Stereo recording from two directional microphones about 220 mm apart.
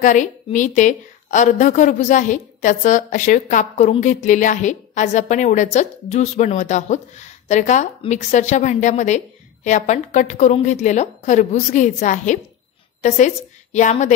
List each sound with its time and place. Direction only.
0.0 s a woman's voice: 35° left (ahead or behind)